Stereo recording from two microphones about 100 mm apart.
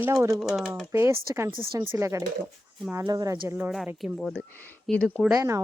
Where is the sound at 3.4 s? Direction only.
20° right (ahead or behind).